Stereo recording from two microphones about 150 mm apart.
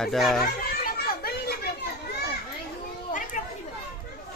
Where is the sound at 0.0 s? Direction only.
Centre (ahead or behind).